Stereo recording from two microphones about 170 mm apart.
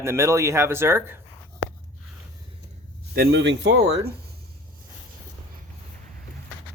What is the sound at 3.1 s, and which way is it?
Speech, 90° right.